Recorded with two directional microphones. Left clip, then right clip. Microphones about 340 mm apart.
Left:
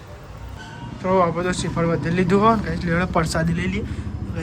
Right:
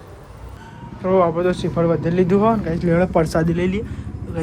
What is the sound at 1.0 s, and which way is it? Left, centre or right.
Speech, centre.